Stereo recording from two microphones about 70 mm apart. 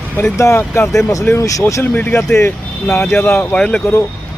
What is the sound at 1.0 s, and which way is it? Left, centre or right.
Speech, left.